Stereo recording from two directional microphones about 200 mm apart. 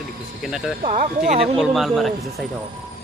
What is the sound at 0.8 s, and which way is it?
Speech, 40° right (ahead or behind).